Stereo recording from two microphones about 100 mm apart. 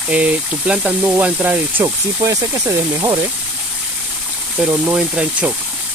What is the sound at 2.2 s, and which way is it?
Speech, 30° right (ahead or behind).